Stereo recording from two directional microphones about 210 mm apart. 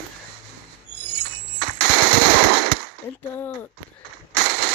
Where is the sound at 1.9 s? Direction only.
50° right (ahead or behind).